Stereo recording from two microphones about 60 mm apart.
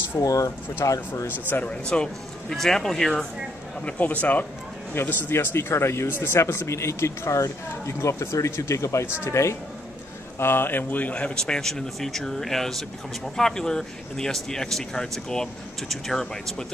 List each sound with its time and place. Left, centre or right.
0.2 s speech: left
1.5 s speech: left
2.5 s speech: centre
3.8 s speech: left
4.9 s speech: left
10.4 s speech: left
11.1 s speech: centre